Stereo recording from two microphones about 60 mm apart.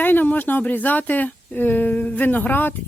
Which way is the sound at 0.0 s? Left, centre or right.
Left.